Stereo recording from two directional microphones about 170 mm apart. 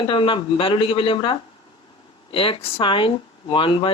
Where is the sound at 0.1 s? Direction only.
30° left (ahead or behind).